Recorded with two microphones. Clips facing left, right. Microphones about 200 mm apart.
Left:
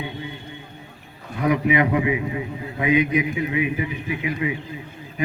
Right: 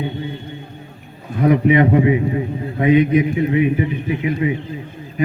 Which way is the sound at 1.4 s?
35° right (ahead or behind).